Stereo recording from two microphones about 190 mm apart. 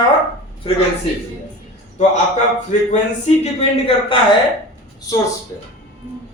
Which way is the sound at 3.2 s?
30° left (ahead or behind).